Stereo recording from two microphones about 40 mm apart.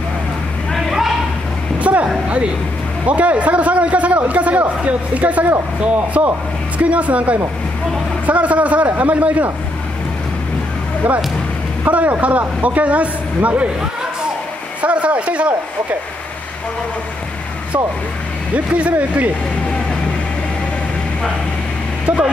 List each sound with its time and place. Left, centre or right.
0.7 s a sound: centre
1.8 s vehicle: right
2.2 s a man's voice: right
11.9 s a man's voice: right
14.8 s a sound: right
18.5 s a man's voice: right